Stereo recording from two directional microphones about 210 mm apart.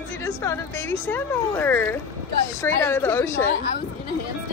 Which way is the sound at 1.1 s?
10° left (ahead or behind).